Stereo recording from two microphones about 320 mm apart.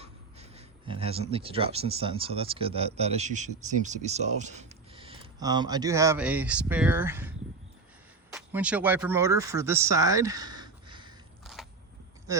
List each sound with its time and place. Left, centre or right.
0.0 s speech: centre
11.6 s biting: centre